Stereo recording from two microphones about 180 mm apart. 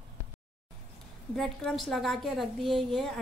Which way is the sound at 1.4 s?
Centre (ahead or behind).